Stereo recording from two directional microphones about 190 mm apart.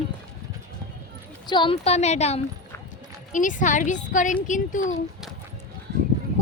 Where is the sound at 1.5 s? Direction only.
25° left (ahead or behind); by 5.0 s 40° left (ahead or behind).